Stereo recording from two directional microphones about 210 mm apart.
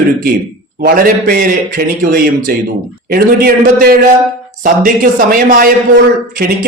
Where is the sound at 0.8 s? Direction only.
45° right (ahead or behind).